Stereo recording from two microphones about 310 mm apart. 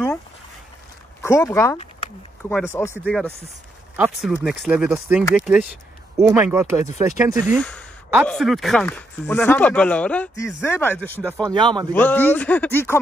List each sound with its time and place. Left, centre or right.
1.2 s speech: centre
3.0 s speech: centre
7.3 s speech: centre
11.4 s speech: centre
11.9 s speech: centre